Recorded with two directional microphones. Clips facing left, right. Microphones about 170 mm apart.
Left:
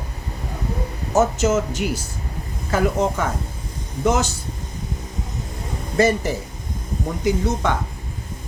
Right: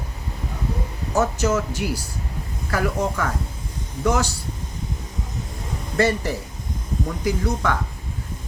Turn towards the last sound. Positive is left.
turn(degrees=20)  # may be behind; listen again after turning